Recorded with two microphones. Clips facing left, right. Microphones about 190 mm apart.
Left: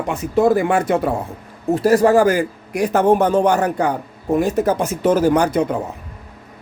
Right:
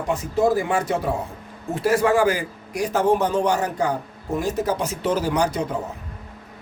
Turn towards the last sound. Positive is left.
turn(degrees=60)  # may be behind; listen again after turning